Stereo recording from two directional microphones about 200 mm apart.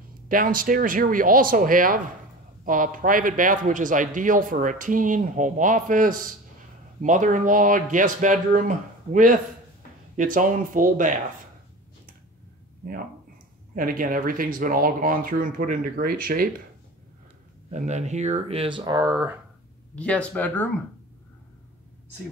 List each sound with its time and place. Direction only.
0.3 s speech: 45° right (ahead or behind)
13.7 s speech: 45° right (ahead or behind)
17.6 s speech: 35° right (ahead or behind); by 19.3 s 15° right (ahead or behind)
20.0 s speech: 5° left (ahead or behind)